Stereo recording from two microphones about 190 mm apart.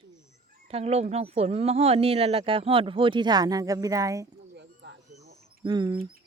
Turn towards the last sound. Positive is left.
turn(degrees=-25)  # may be behind; listen again after turning